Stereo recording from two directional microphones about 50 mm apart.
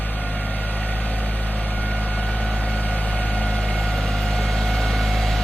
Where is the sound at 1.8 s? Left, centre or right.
Left.